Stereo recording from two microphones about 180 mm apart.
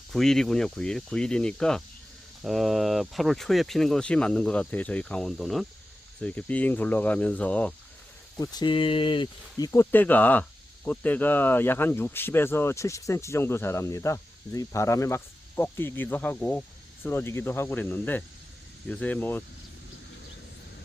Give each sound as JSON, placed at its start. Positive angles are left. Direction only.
{"t": 0.1, "sound": "speech", "side_deg": 0}
{"t": 8.4, "sound": "speech", "side_deg": 25}
{"t": 9.9, "sound": "speech", "side_deg": 10}